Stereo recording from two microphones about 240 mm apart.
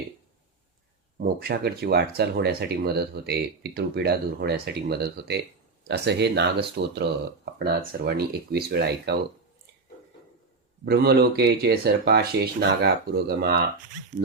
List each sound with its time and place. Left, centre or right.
1.2 s speech: right
10.8 s speech: right